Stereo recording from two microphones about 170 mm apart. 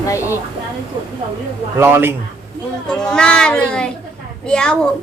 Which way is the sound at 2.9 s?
5° left (ahead or behind).